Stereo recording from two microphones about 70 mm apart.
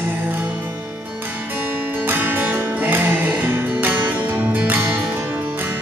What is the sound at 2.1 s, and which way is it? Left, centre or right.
Music, right.